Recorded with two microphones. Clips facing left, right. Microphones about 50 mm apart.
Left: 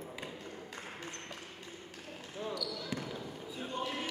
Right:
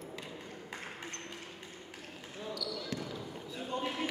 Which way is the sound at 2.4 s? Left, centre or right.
Centre.